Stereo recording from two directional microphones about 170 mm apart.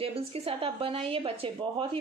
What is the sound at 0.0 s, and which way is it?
Speech, 35° right (ahead or behind).